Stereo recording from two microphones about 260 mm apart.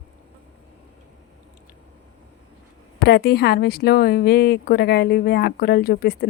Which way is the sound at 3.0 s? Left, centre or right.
Left.